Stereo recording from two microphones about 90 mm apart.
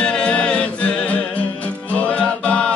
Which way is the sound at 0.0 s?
10° left (ahead or behind).